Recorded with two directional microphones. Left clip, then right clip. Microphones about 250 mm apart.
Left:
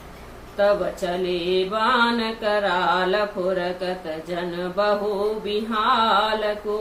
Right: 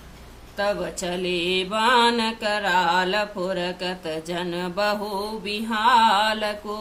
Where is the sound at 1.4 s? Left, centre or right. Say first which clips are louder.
Even; right.